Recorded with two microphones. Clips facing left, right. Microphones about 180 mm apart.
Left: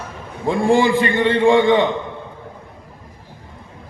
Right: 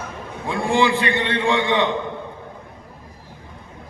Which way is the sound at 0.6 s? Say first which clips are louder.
Left 3 dB; 50° left (ahead or behind).